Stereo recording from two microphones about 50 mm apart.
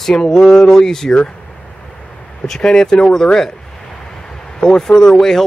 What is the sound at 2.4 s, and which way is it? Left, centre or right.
Speech, centre.